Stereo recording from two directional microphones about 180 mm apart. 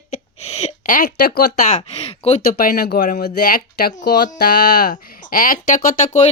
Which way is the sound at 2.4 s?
55° left (ahead or behind).